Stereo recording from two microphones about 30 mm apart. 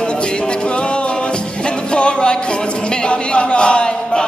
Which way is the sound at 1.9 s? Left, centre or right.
Left.